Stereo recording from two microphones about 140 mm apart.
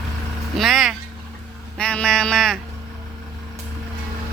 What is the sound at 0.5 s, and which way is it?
Vehicle, centre (ahead or behind).